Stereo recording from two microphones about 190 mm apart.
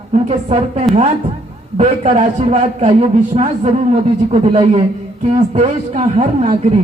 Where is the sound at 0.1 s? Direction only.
35° right (ahead or behind).